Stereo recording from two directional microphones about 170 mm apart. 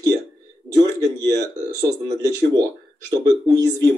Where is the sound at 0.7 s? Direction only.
20° right (ahead or behind).